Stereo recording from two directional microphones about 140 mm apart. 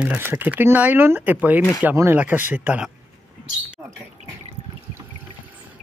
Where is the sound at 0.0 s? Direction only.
10° right (ahead or behind).